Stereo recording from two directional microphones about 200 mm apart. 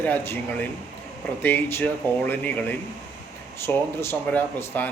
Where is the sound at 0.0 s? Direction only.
10° left (ahead or behind).